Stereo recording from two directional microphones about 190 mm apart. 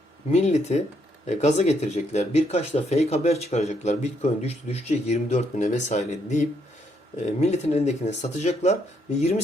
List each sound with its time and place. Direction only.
0.3 s speech: 35° left (ahead or behind)